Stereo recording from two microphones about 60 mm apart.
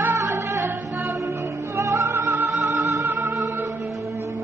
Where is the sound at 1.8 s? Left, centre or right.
Right.